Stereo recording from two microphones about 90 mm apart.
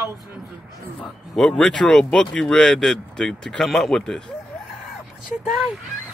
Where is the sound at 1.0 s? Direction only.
10° left (ahead or behind).